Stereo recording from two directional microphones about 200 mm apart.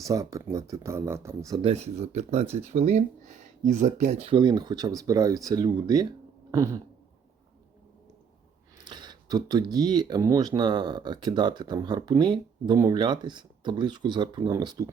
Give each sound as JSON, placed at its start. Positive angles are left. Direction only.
{"t": 0.0, "sound": "speech", "side_deg": -15}
{"t": 1.6, "sound": "speech", "side_deg": -30}
{"t": 6.5, "sound": "a sound", "side_deg": -15}
{"t": 8.8, "sound": "speech", "side_deg": -20}